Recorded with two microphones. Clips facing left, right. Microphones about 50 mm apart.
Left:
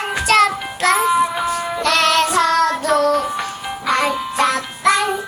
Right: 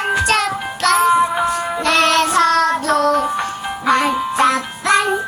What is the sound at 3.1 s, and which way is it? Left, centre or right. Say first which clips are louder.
Music: right 2 dB; centre.